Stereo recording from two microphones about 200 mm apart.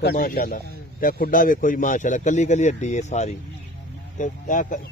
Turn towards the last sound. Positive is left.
turn(degrees=40)  # may be behind; listen again after turning